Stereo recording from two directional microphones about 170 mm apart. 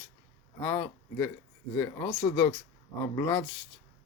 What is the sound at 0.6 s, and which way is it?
Speech, 10° left (ahead or behind).